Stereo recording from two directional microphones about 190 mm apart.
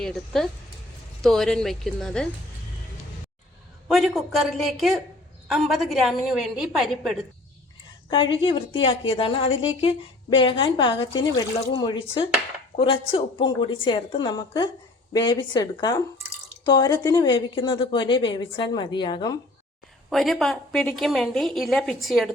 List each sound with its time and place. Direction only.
0.0 s a woman's voice: centre (ahead or behind)
3.8 s a woman's voice: centre (ahead or behind)
8.1 s a woman's voice: 25° left (ahead or behind)
20.1 s a woman's voice: centre (ahead or behind)